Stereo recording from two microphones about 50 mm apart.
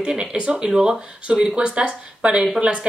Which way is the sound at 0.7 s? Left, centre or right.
Centre.